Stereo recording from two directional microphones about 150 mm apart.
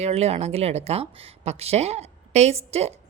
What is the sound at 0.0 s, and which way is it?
Speech, 45° right (ahead or behind).